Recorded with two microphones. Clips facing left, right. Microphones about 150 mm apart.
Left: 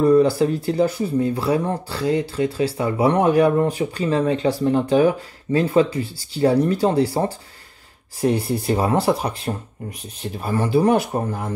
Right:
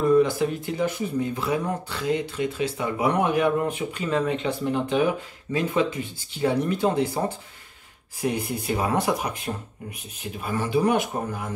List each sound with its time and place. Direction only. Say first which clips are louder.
0.0 s speech: left 4 dB; 35° left (ahead or behind)